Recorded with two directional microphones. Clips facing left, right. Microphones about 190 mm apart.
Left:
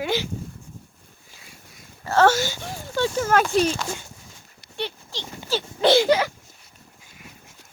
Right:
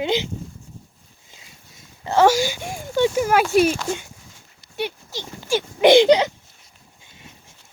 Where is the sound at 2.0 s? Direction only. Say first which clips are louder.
Right 2 dB; 15° right (ahead or behind).